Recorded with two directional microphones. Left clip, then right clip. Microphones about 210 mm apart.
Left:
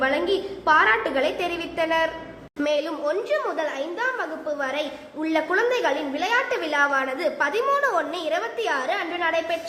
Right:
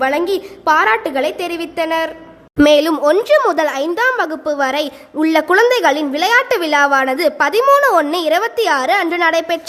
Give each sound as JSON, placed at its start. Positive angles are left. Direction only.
{"t": 0.0, "sound": "a woman's voice", "side_deg": -45}
{"t": 2.6, "sound": "a woman's voice", "side_deg": -55}